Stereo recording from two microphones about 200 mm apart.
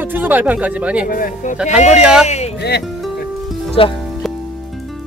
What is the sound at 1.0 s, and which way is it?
Speech, 40° left (ahead or behind).